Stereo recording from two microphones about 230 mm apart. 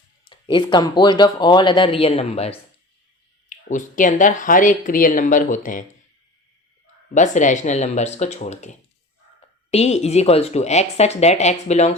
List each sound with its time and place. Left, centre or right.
0.3 s speech: left
7.1 s speech: left